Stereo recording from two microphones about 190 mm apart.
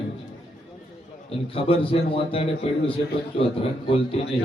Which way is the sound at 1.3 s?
30° left (ahead or behind).